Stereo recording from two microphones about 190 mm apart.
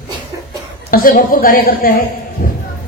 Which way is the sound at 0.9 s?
50° left (ahead or behind).